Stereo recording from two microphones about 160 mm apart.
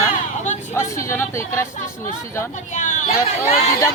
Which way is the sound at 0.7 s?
15° left (ahead or behind).